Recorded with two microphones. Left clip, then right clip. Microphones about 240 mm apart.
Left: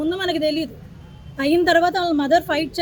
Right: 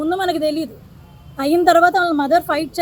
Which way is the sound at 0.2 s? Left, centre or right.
Left.